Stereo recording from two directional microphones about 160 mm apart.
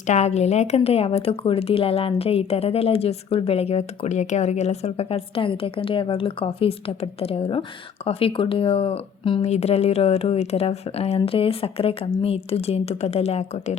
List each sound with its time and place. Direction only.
0.1 s speech: 45° left (ahead or behind)